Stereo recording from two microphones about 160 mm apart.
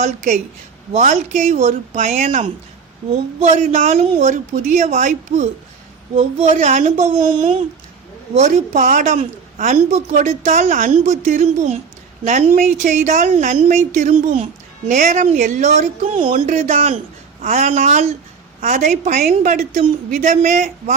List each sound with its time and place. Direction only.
0.9 s a woman's voice: 55° right (ahead or behind)